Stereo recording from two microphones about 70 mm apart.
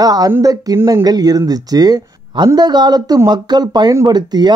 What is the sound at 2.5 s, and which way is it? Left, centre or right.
Speech, right.